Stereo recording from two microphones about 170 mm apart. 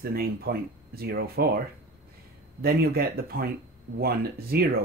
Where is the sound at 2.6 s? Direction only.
65° right (ahead or behind).